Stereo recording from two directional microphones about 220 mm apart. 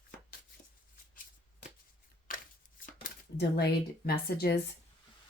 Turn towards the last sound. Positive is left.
turn(degrees=45)  # may be behind; listen again after turning